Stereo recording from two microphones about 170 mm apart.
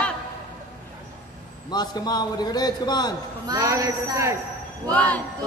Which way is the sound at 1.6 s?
25° left (ahead or behind).